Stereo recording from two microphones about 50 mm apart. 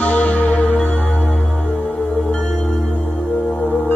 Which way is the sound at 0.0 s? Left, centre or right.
Left.